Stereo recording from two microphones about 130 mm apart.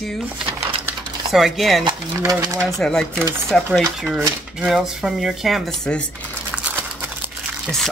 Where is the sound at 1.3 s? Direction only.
Centre (ahead or behind).